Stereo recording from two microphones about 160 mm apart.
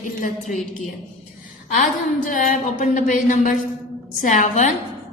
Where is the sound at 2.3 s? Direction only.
55° left (ahead or behind).